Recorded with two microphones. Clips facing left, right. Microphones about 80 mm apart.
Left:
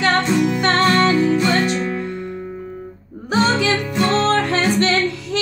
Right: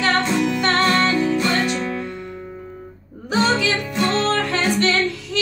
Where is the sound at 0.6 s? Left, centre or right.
Left.